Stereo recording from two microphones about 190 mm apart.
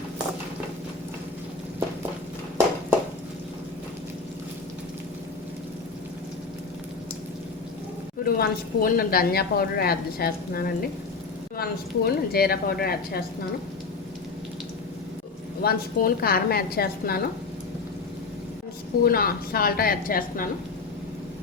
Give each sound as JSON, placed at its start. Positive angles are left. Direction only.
{"t": 8.2, "sound": "a woman's voice", "side_deg": 50}
{"t": 15.6, "sound": "a woman's voice", "side_deg": 50}
{"t": 19.0, "sound": "a woman's voice", "side_deg": 50}